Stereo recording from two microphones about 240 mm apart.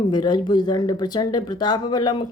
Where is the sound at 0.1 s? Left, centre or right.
Centre.